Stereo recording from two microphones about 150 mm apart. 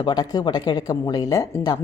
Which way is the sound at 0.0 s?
25° left (ahead or behind).